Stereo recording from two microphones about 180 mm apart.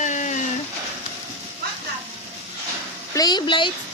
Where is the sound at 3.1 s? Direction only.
20° left (ahead or behind).